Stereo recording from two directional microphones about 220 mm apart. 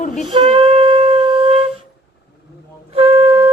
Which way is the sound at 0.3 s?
20° right (ahead or behind).